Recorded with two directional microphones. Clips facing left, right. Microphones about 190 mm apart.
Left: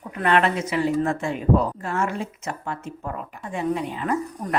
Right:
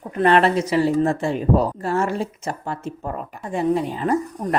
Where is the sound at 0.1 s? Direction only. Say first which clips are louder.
Right 4 dB; 35° right (ahead or behind).